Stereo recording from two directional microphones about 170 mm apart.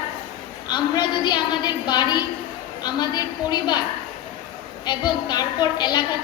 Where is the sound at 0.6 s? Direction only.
25° left (ahead or behind).